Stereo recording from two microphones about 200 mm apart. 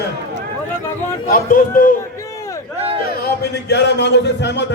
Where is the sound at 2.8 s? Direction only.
30° right (ahead or behind).